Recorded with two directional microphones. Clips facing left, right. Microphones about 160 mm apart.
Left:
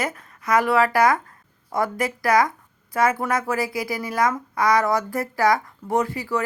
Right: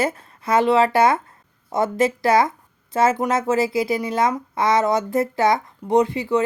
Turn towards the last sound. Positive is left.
turn(degrees=-20)  # may be behind; listen again after turning